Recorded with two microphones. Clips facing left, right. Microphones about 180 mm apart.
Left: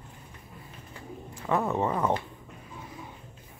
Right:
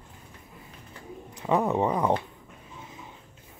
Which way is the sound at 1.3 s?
20° right (ahead or behind).